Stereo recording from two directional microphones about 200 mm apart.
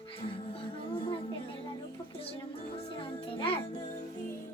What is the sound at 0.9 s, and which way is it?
Music, 25° left (ahead or behind).